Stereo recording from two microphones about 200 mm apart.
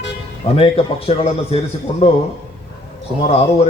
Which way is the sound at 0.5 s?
30° left (ahead or behind).